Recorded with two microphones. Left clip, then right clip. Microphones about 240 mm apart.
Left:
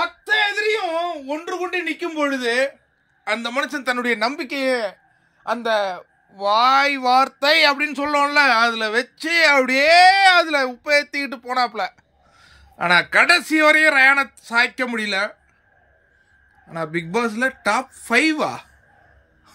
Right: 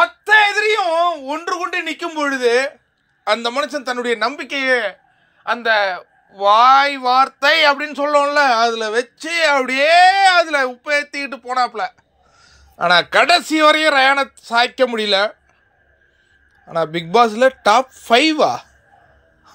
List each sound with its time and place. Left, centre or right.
0.2 s a sound: centre
3.3 s a man's voice: centre
16.6 s a man's voice: centre